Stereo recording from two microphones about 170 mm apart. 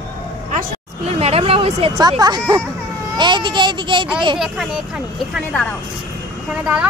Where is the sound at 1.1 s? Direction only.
35° right (ahead or behind).